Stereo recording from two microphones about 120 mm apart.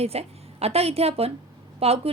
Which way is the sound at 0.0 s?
60° right (ahead or behind).